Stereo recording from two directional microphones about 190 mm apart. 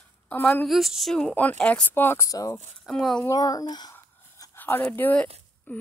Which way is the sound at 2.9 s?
Centre (ahead or behind).